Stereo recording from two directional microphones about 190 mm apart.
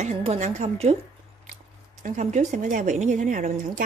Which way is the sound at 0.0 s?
35° right (ahead or behind).